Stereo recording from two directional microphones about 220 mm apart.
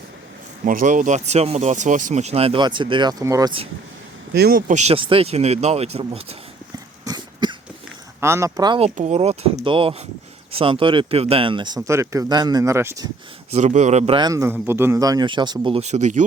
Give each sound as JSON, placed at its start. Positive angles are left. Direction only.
{"t": 0.6, "sound": "speech", "side_deg": -35}
{"t": 4.4, "sound": "speech", "side_deg": -40}
{"t": 7.0, "sound": "cough", "side_deg": -20}
{"t": 8.2, "sound": "speech", "side_deg": -10}
{"t": 9.0, "sound": "speech", "side_deg": -30}
{"t": 13.5, "sound": "a man's voice", "side_deg": -30}
{"t": 14.2, "sound": "speech", "side_deg": -15}